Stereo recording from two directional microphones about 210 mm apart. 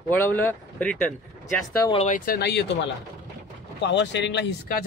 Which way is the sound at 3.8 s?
55° left (ahead or behind).